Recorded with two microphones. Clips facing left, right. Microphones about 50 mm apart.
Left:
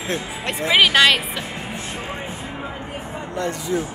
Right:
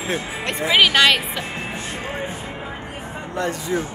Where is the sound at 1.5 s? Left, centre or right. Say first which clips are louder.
Right 1 dB; right.